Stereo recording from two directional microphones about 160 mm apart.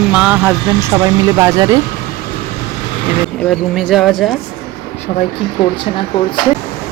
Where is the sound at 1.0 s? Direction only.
25° right (ahead or behind).